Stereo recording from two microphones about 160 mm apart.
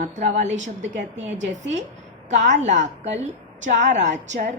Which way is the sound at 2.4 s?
50° right (ahead or behind).